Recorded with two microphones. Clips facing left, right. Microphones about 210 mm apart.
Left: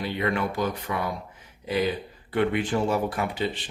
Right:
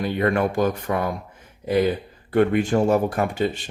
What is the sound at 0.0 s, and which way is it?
Speech, 50° right (ahead or behind).